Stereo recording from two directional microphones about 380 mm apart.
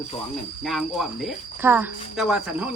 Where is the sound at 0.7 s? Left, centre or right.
Centre.